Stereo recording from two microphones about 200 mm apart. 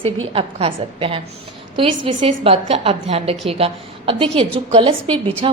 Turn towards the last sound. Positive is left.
turn(degrees=-25)  # may be behind; listen again after turning